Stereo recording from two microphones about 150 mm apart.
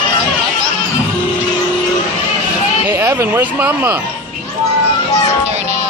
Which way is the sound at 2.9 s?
20° right (ahead or behind).